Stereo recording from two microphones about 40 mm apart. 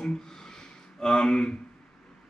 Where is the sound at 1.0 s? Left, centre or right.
Centre.